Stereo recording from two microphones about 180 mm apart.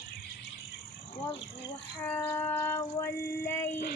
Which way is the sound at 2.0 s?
10° left (ahead or behind).